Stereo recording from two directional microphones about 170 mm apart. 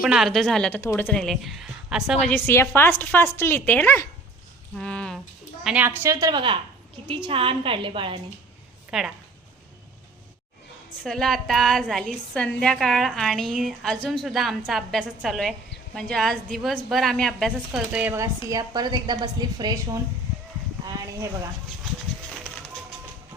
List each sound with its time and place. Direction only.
0.0 s a woman's voice: 5° right (ahead or behind)
2.2 s a woman's voice: 15° left (ahead or behind)
4.8 s a sound: 5° left (ahead or behind)
5.6 s a woman's voice: 10° right (ahead or behind)
6.0 s a woman's voice: 20° right (ahead or behind)
8.9 s a woman's voice: 5° right (ahead or behind)
11.0 s a woman's voice: centre (ahead or behind); by 20.0 s 20° right (ahead or behind)